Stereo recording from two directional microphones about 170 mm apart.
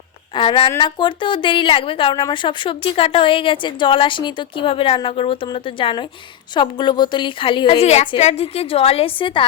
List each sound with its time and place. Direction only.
0.3 s a woman's voice: 30° left (ahead or behind)